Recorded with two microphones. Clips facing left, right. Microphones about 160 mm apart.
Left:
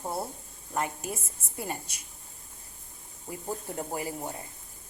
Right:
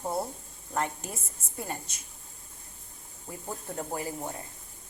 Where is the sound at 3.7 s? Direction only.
15° left (ahead or behind).